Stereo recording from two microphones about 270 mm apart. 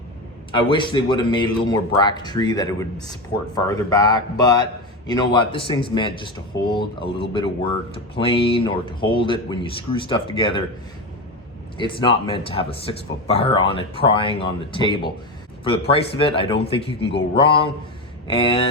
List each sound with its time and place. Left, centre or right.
0.5 s a man's voice: centre
11.8 s speech: centre